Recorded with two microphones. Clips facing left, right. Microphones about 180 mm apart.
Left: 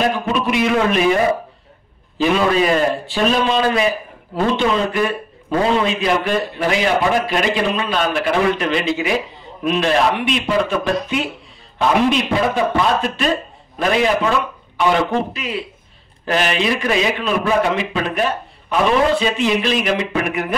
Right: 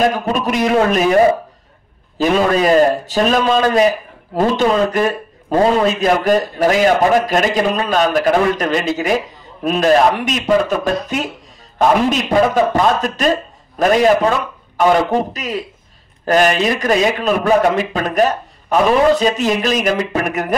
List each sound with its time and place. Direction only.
0.1 s a man's voice: 40° right (ahead or behind)
2.1 s a man's voice: 40° right (ahead or behind)